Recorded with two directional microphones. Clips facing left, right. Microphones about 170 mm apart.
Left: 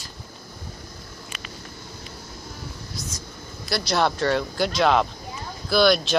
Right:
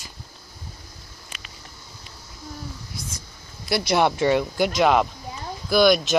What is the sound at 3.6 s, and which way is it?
Speech, 15° right (ahead or behind).